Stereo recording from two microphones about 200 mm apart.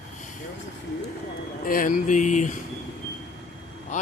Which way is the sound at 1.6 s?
45° left (ahead or behind).